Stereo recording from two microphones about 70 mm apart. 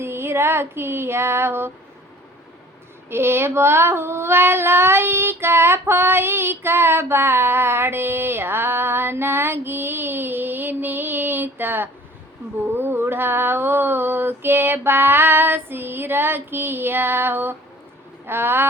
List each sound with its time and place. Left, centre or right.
0.0 s child singing: right
3.1 s child singing: right